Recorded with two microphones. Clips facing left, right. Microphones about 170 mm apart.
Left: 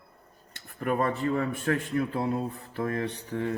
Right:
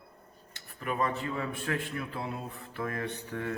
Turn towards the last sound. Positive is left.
turn(degrees=25)  # may be behind; listen again after turning